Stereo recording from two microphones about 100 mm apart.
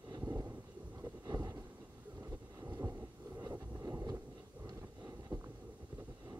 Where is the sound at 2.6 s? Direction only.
35° right (ahead or behind).